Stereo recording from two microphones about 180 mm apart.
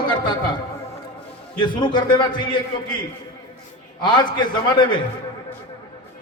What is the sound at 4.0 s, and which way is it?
A man's voice, 25° left (ahead or behind).